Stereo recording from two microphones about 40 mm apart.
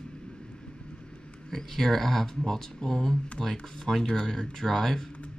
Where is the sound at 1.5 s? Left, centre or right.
Centre.